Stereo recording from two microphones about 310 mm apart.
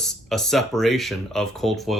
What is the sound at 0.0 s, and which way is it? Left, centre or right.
Speech, centre.